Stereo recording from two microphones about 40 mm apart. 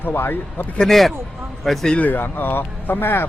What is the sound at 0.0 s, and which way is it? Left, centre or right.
Speech, left.